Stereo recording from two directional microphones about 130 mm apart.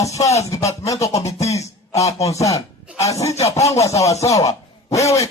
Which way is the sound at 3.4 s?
55° left (ahead or behind).